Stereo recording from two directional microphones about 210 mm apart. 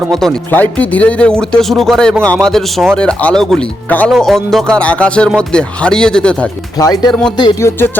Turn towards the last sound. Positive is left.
turn(degrees=15)  # may be behind; listen again after turning